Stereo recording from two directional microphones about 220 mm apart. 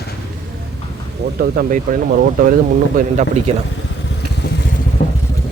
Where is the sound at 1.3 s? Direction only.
45° right (ahead or behind).